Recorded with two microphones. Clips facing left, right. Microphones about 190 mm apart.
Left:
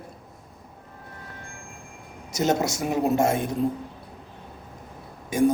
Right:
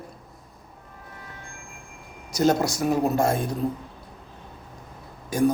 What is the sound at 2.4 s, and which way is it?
A man's voice, 20° left (ahead or behind).